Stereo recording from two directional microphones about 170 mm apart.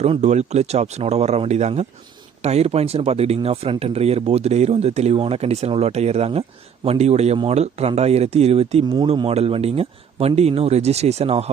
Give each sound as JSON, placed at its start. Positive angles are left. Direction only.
{"t": 0.0, "sound": "speech", "side_deg": -40}